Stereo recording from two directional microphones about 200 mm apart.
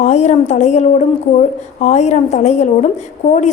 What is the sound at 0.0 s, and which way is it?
A woman's voice, 35° left (ahead or behind).